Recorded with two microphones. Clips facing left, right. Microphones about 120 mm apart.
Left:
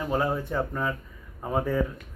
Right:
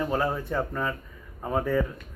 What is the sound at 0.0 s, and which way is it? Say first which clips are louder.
Speech: even; 15° left (ahead or behind).